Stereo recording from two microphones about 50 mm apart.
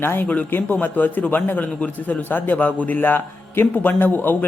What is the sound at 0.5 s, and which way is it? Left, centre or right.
A man's voice, left.